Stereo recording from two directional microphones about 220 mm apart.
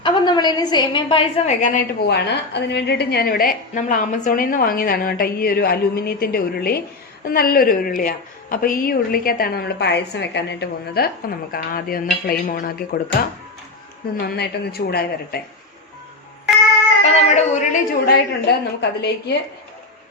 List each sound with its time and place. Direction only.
0.0 s a woman's voice: 20° left (ahead or behind)
2.0 s a woman's voice: 50° left (ahead or behind)
14.3 s a woman's voice: 45° left (ahead or behind)
17.0 s speech: 30° left (ahead or behind)
18.8 s a woman's voice: 50° left (ahead or behind)